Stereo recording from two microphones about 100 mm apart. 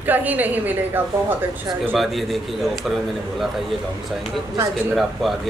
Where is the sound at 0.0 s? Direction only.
20° right (ahead or behind).